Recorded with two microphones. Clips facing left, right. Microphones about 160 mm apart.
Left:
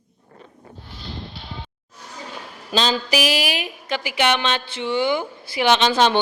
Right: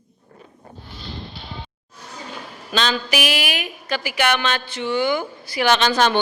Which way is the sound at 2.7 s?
35° left (ahead or behind).